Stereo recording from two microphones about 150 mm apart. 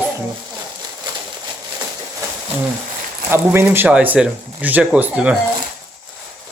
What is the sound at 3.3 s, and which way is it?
Speech, 15° right (ahead or behind).